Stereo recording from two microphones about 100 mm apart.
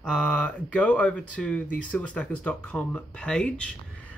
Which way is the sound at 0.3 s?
15° left (ahead or behind).